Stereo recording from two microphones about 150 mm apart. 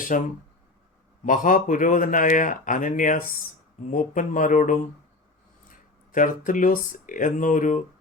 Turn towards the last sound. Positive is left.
turn(degrees=60)  # may be behind; listen again after turning